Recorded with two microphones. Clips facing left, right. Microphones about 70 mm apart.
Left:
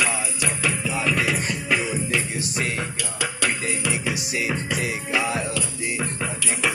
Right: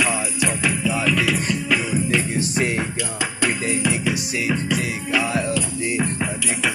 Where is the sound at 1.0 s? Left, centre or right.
Left.